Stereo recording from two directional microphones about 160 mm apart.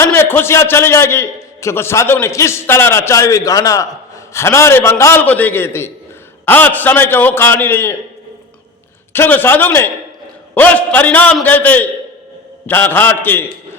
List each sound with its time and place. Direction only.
0.0 s a man's voice: 15° left (ahead or behind)
9.1 s a man's voice: 10° left (ahead or behind)